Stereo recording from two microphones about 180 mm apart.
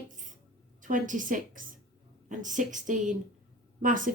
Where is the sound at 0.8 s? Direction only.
45° right (ahead or behind).